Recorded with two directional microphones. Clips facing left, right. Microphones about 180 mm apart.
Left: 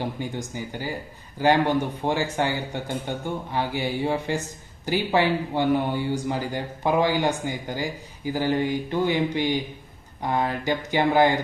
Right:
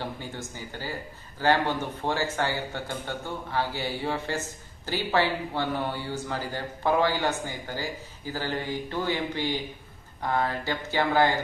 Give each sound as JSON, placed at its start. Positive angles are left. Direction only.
{"t": 0.0, "sound": "speech", "side_deg": 15}